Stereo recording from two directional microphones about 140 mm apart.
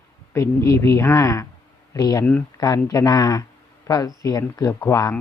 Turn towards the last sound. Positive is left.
turn(degrees=20)  # may be behind; listen again after turning